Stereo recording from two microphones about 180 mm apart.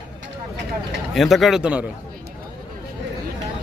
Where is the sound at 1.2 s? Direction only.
Centre (ahead or behind).